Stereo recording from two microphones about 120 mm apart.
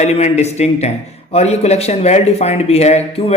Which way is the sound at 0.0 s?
65° left (ahead or behind).